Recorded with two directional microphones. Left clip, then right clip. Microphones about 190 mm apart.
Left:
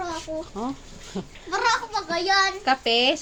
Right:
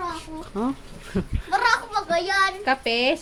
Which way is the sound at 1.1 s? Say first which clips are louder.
Right 5 dB; 55° right (ahead or behind).